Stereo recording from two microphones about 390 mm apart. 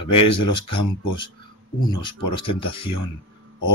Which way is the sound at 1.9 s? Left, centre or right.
Centre.